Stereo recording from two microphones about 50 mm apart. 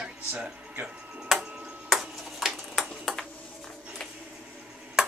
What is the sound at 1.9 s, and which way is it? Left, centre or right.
Ping, centre.